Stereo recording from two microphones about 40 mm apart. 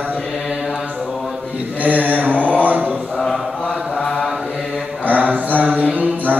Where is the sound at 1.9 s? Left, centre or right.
Right.